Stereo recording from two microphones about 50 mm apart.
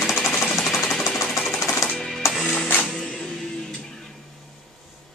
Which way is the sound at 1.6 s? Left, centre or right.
Left.